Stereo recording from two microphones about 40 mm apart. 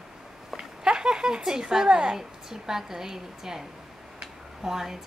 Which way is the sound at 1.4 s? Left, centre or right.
Centre.